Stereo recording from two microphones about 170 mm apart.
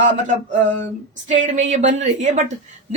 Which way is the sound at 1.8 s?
90° right.